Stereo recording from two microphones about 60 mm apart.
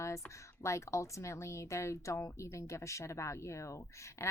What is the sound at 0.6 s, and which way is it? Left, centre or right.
Speech, left.